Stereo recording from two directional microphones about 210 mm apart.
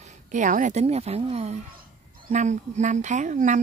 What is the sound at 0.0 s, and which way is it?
Speech, 35° right (ahead or behind).